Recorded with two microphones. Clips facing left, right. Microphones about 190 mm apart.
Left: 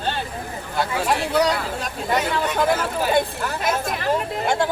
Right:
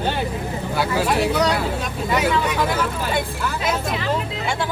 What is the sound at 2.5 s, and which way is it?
Speech, 50° left (ahead or behind).